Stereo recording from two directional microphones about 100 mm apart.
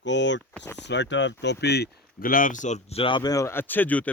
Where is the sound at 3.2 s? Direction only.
35° left (ahead or behind); by 4.0 s 15° left (ahead or behind).